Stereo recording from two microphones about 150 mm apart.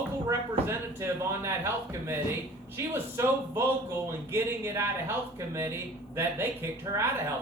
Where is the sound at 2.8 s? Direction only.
15° right (ahead or behind).